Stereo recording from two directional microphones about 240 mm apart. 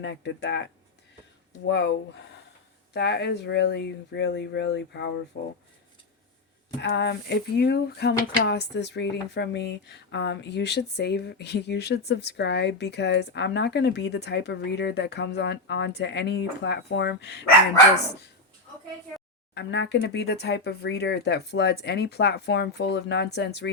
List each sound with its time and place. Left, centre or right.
0.0 s speech: left
6.8 s speech: left
19.5 s speech: left